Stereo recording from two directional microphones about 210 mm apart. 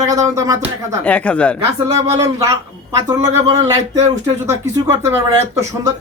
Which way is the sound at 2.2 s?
15° right (ahead or behind).